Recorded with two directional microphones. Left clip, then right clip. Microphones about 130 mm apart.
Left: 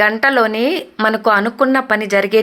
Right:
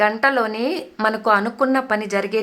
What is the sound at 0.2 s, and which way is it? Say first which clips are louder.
Speech: left 5 dB; 25° left (ahead or behind).